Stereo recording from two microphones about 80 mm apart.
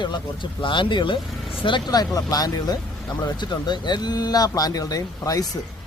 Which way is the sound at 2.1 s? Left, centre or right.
Left.